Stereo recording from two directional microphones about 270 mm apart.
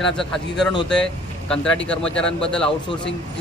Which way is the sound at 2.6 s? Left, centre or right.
Centre.